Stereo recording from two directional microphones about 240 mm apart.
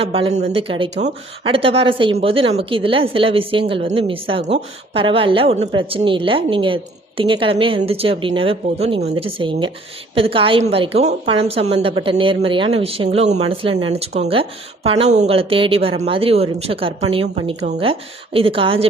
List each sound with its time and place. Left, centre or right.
0.0 s speech: right